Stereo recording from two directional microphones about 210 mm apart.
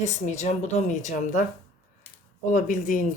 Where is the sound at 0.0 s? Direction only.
35° left (ahead or behind).